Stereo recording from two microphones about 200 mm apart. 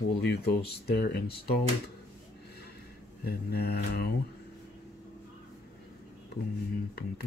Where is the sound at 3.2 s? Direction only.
50° left (ahead or behind).